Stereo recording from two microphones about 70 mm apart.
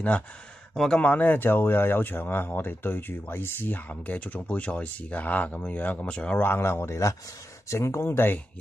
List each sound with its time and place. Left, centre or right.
0.7 s speech: centre
1.0 s speech: left
3.9 s speech: left
6.4 s speech: left